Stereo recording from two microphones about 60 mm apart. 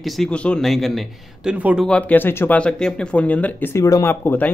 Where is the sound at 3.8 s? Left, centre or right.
Left.